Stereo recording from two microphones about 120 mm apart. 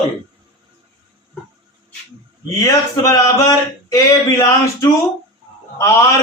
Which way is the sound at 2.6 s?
30° left (ahead or behind).